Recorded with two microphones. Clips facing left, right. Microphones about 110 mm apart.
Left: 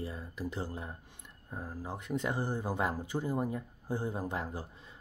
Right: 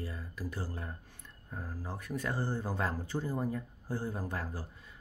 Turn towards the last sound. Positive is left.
turn(degrees=20)  # may be behind; listen again after turning